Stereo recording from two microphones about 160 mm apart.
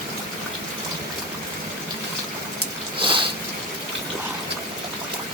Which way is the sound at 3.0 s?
30° right (ahead or behind).